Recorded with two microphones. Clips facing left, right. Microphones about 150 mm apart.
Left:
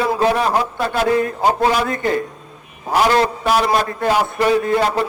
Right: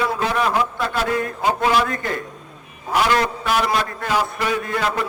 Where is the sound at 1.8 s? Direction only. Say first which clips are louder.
Left 6 dB; 30° left (ahead or behind).